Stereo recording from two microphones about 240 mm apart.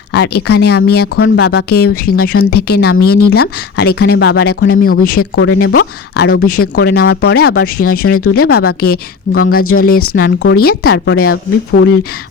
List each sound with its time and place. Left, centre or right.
0.1 s speech: left
2.2 s speech: left
2.5 s speech: left
5.2 s speech: left
6.6 s speech: left
7.8 s speech: left
8.4 s speech: left
9.6 s speech: left
10.4 s speech: left